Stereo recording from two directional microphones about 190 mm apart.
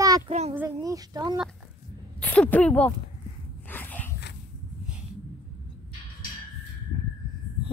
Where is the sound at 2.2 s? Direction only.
5° left (ahead or behind).